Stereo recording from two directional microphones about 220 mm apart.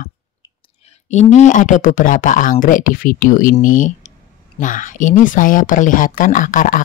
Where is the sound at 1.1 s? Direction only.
35° left (ahead or behind).